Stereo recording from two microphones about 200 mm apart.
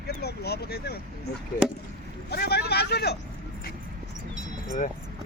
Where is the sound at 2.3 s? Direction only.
55° left (ahead or behind).